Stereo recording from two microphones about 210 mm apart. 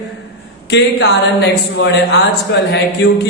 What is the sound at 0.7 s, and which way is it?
A man's voice, 55° left (ahead or behind).